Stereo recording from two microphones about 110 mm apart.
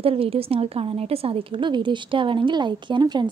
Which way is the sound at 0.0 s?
60° right (ahead or behind).